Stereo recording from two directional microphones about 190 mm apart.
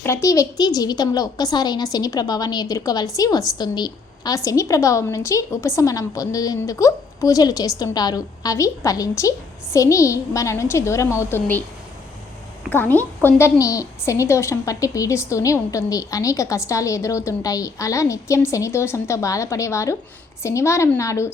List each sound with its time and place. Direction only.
0.0 s a woman's voice: 15° left (ahead or behind)
12.7 s a woman's voice: 10° left (ahead or behind)